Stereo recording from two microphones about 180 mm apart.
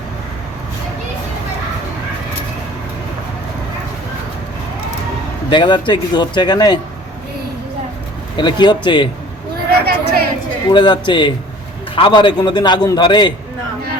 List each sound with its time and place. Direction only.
5.5 s a man's voice: 25° left (ahead or behind)
8.4 s a man's voice: 25° left (ahead or behind)
9.8 s a sound: 60° right (ahead or behind)
10.7 s a man's voice: 25° left (ahead or behind)